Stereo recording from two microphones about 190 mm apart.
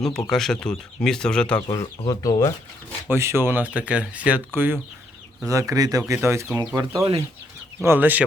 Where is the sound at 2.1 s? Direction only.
20° left (ahead or behind).